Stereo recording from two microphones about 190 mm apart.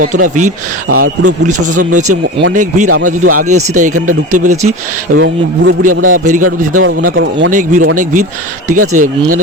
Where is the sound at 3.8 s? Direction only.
40° right (ahead or behind).